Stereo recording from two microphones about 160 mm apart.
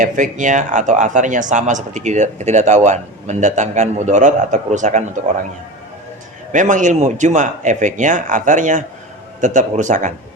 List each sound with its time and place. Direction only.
0.0 s speech: 50° right (ahead or behind)
6.5 s speech: 50° right (ahead or behind)